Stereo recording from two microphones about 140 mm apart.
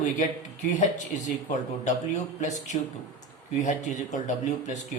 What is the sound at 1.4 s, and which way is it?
Speech, 60° left (ahead or behind).